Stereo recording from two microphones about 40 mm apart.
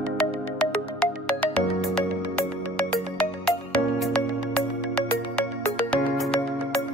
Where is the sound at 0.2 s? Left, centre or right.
Left.